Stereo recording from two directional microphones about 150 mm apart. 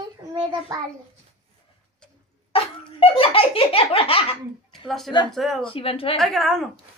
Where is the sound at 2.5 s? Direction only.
40° left (ahead or behind).